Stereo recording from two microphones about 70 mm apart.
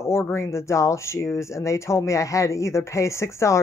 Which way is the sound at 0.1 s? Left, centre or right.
Left.